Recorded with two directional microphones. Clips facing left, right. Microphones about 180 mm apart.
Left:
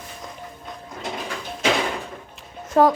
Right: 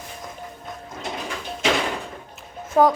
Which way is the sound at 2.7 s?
5° right (ahead or behind).